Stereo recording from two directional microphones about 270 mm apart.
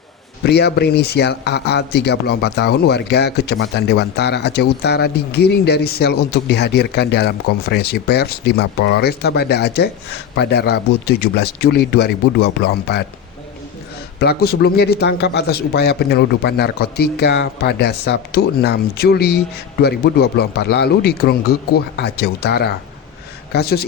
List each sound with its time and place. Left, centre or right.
0.4 s speech: left
14.2 s speech: left